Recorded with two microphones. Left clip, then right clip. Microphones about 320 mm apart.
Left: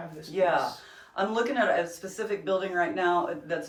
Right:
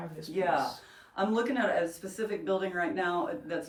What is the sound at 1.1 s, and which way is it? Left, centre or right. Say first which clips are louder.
Speech: left 3 dB; centre.